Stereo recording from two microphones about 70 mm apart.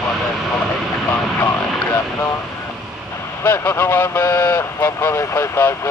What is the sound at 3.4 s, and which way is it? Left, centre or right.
Vehicle, left.